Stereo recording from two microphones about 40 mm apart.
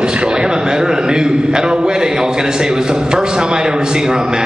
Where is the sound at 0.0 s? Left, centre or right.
Right.